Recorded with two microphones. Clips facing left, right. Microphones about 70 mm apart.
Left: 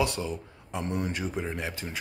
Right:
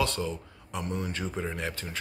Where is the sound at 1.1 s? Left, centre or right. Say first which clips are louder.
Left 1 dB; centre.